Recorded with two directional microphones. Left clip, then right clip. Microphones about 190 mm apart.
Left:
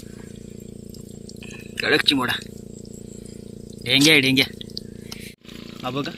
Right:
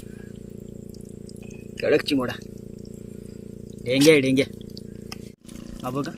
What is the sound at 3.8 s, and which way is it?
Speech, 5° left (ahead or behind).